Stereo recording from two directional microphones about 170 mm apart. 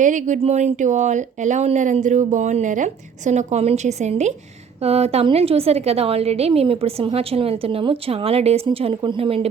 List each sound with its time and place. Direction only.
0.0 s a woman's voice: 45° right (ahead or behind); by 9.5 s 30° right (ahead or behind)